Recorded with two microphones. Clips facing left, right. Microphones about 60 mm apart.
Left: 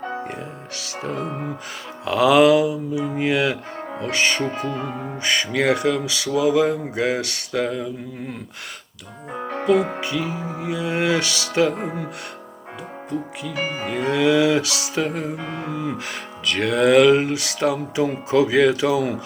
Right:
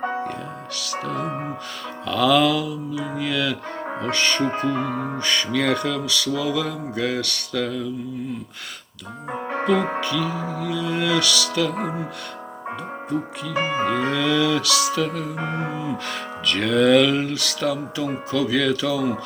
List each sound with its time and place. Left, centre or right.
2.0 s music: centre
5.2 s speech: centre
5.9 s music: left
10.0 s music: left
13.6 s speech: right
14.1 s music: centre
15.4 s music: right
15.7 s music: left
16.0 s music: centre; by 19.1 s left